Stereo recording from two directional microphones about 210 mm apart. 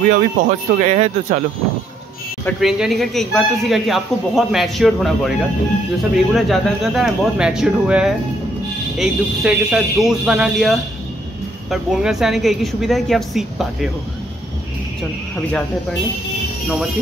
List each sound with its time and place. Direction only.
0.1 s speech: 40° right (ahead or behind)
2.4 s speech: centre (ahead or behind)